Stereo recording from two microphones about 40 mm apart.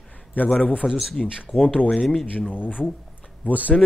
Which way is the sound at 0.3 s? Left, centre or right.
Left.